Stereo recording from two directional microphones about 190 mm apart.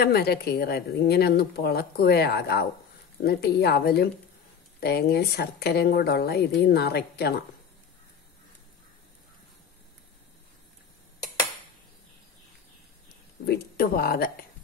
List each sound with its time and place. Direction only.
0.0 s speech: 55° left (ahead or behind)
13.5 s speech: 50° left (ahead or behind)